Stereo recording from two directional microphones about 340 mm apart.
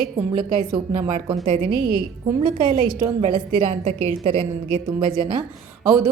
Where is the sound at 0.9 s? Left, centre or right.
Centre.